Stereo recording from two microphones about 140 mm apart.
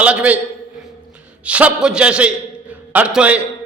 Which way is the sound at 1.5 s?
10° right (ahead or behind).